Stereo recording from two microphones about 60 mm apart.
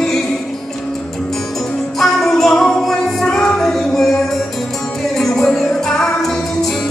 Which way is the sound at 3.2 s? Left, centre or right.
Centre.